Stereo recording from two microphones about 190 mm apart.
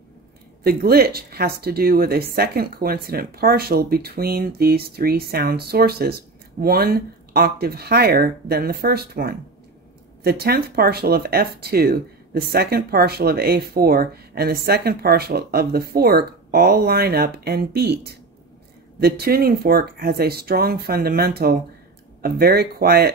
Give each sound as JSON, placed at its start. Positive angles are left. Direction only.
{"t": 0.7, "sound": "speech", "side_deg": -55}